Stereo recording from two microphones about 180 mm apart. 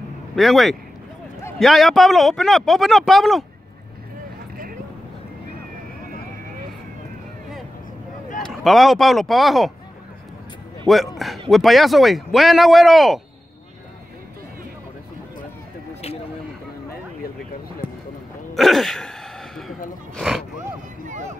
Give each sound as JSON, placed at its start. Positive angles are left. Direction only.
{"t": 0.4, "sound": "speech", "side_deg": 0}
{"t": 8.4, "sound": "speech", "side_deg": 0}
{"t": 11.1, "sound": "speech", "side_deg": 0}
{"t": 18.5, "sound": "sneeze", "side_deg": 0}
{"t": 20.2, "sound": "speech", "side_deg": 0}